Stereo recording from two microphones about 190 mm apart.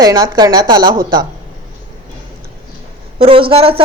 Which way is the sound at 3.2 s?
30° right (ahead or behind).